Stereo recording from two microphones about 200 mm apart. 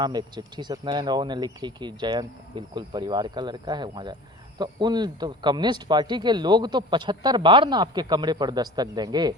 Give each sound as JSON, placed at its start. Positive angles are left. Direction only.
{"t": 0.0, "sound": "speech", "side_deg": -20}